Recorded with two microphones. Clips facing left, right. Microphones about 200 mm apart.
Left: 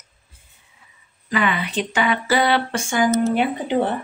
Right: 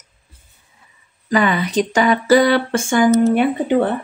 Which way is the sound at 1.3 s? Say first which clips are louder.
Right 5 dB; 40° right (ahead or behind).